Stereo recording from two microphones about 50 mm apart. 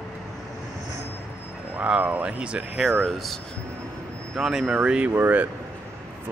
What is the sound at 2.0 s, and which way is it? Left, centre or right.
Speech, right.